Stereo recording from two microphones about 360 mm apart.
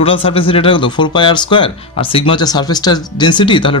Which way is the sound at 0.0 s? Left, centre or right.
Centre.